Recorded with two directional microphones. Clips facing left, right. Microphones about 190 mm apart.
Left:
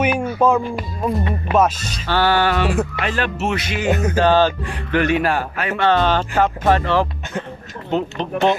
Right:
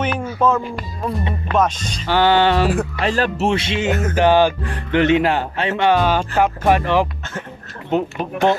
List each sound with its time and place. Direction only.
0.0 s speech: 10° left (ahead or behind)
2.0 s speech: 20° right (ahead or behind)
3.0 s speech: 35° right (ahead or behind)
4.1 s speech: 15° right (ahead or behind)
5.9 s speech: 10° right (ahead or behind)